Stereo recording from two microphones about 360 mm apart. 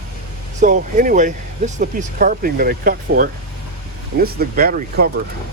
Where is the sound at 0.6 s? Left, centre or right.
Right.